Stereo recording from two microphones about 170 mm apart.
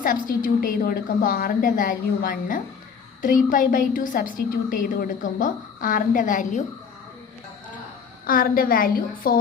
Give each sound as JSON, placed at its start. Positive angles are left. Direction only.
{"t": 0.0, "sound": "a woman's voice", "side_deg": 55}
{"t": 8.3, "sound": "a woman's voice", "side_deg": 55}